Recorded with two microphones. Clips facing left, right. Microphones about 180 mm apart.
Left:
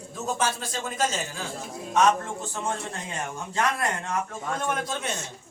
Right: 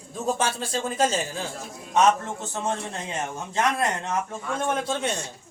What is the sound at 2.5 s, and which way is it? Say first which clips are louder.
Speech: right 4 dB; 20° right (ahead or behind).